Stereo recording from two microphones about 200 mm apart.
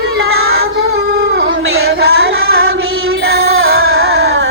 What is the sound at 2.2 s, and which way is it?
Carnatic music, 90° right.